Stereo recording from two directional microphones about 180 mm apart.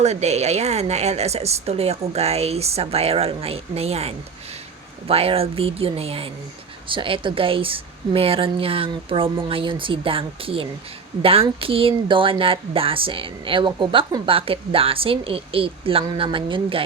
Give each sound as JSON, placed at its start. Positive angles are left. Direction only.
{"t": 0.0, "sound": "a woman's voice", "side_deg": -35}